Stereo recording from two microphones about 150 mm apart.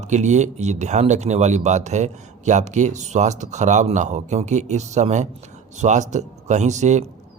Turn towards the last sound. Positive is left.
turn(degrees=-50)  # may be behind; listen again after turning